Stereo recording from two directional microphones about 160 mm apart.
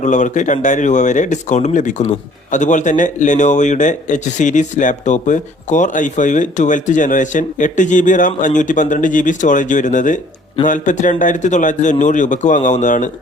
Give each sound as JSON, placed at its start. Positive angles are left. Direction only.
{"t": 0.0, "sound": "a man's voice", "side_deg": 50}